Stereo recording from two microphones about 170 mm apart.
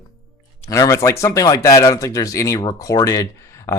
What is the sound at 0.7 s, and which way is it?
Speech, 20° left (ahead or behind).